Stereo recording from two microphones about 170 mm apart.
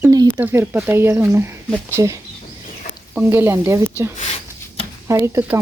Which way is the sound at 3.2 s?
15° right (ahead or behind).